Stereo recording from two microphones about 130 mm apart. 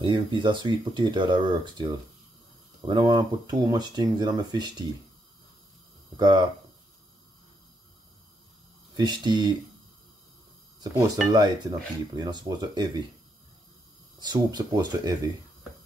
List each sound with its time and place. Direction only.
0.0 s speech: 40° right (ahead or behind)
6.1 s speech: 35° right (ahead or behind)
8.9 s speech: 35° right (ahead or behind)
11.2 s speech: 30° right (ahead or behind)
14.2 s speech: 35° right (ahead or behind)